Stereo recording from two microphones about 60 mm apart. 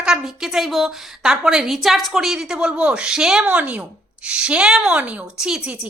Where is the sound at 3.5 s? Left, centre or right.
Right.